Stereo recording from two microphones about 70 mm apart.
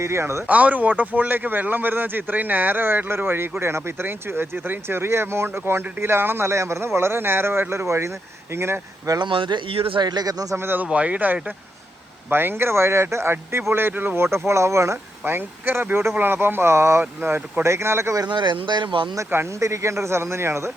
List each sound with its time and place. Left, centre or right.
0.0 s speech: right
0.4 s speech: right
9.0 s speech: right
10.0 s speech: right
10.5 s speech: right
10.8 s speech: centre
12.3 s speech: right
15.2 s speech: right
17.0 s speech: right
18.2 s speech: right
19.5 s speech: right